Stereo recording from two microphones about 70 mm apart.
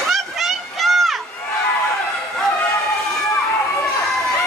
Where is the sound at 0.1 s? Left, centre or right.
Centre.